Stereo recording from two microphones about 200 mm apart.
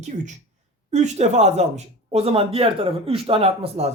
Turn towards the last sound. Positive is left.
turn(degrees=-30)  # may be behind; listen again after turning